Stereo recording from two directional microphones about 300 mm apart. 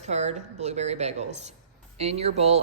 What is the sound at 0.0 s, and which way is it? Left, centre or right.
Speech, right.